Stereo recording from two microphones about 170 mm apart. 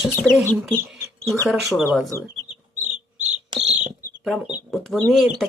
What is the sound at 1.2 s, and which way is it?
Speech, centre (ahead or behind).